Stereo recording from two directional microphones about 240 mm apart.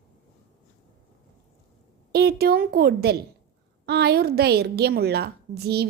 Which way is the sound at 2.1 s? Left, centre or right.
Right.